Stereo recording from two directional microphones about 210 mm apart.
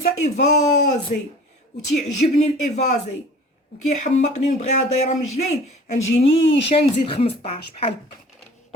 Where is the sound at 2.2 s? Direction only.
40° left (ahead or behind).